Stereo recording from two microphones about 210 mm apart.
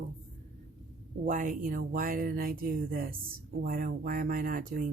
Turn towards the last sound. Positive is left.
turn(degrees=-40)  # may be behind; listen again after turning